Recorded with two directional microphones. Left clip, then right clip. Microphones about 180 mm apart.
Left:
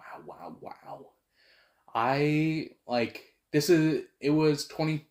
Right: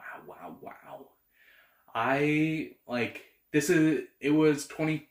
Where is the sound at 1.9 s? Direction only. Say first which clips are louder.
Even; 40° left (ahead or behind).